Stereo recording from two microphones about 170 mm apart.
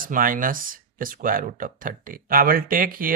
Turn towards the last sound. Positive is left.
turn(degrees=-55)  # may be behind; listen again after turning